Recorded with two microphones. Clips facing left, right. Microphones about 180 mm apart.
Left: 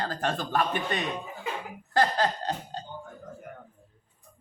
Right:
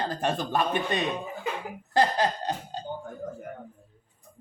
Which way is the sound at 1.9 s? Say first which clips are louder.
Right 1 dB; 15° right (ahead or behind).